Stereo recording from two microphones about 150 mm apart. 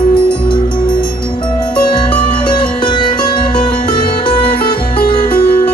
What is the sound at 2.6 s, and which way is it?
Music, 35° left (ahead or behind).